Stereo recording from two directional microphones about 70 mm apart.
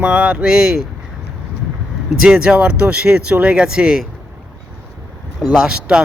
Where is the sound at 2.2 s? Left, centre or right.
Centre.